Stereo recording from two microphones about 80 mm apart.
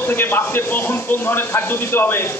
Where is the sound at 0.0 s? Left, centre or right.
Left.